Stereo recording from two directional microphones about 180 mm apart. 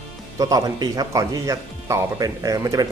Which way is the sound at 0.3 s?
20° right (ahead or behind).